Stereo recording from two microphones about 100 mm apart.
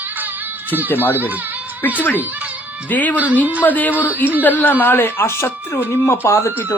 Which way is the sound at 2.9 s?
15° left (ahead or behind).